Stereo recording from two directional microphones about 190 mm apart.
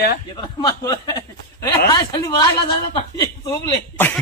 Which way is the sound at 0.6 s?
15° left (ahead or behind).